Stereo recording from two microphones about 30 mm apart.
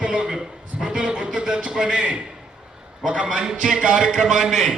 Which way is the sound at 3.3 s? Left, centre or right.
Right.